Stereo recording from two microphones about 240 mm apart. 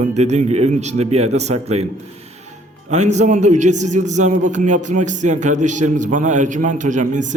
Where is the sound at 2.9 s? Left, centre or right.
Right.